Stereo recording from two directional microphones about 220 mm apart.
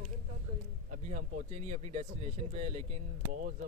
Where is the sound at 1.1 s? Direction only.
30° right (ahead or behind).